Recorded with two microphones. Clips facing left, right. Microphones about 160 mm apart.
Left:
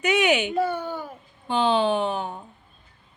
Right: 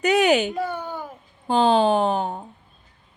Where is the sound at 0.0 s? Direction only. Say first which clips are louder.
Right 3 dB; 35° right (ahead or behind).